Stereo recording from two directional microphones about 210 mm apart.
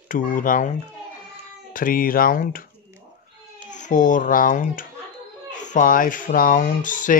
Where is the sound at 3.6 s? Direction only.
35° left (ahead or behind).